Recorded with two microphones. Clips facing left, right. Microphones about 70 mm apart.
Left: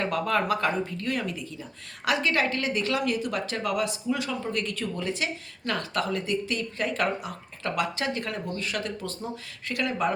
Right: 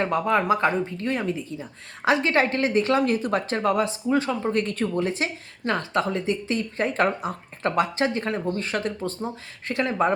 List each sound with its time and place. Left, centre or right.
0.0 s speech: right